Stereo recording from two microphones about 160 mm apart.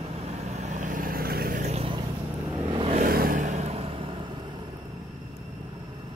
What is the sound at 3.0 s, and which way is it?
Vehicle, 65° right (ahead or behind).